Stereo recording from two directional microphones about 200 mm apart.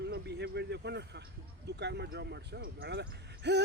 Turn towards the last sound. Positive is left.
turn(degrees=-55)  # may be behind; listen again after turning